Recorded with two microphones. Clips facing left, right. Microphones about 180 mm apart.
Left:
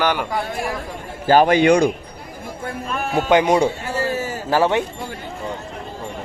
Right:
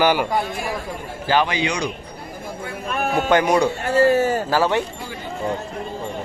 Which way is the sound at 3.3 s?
20° left (ahead or behind).